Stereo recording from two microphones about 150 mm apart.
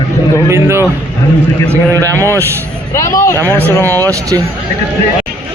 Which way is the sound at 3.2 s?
15° left (ahead or behind).